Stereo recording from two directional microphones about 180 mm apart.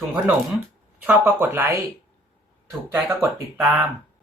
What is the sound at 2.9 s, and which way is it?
Speech, 15° right (ahead or behind).